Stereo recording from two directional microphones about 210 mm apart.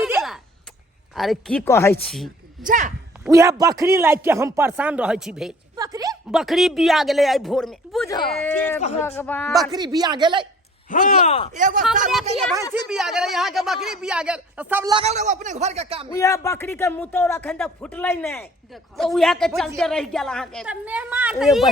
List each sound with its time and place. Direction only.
0.0 s a sound: centre (ahead or behind)
1.1 s speech: centre (ahead or behind)
2.0 s speech: centre (ahead or behind)
2.6 s a man's voice: 40° right (ahead or behind)
3.2 s a man's voice: 15° right (ahead or behind)
5.7 s a sound: 15° right (ahead or behind)
6.3 s speech: centre (ahead or behind)
9.7 s speech: 20° right (ahead or behind)
10.8 s speech: 40° left (ahead or behind)
11.5 s a man's voice: 40° right (ahead or behind)
12.7 s speech: 5° right (ahead or behind)
14.9 s a man's voice: 30° right (ahead or behind)
16.1 s speech: 15° left (ahead or behind)